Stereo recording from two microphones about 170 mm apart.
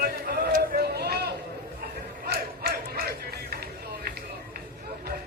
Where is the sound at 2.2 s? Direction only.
65° right (ahead or behind).